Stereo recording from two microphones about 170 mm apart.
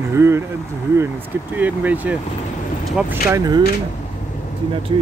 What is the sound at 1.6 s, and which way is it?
Speech, 10° right (ahead or behind).